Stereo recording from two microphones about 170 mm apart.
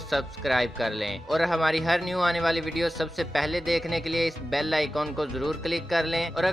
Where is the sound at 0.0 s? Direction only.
Centre (ahead or behind).